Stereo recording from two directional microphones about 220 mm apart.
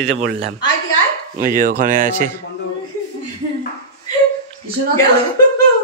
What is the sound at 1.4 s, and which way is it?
Speech, 40° right (ahead or behind).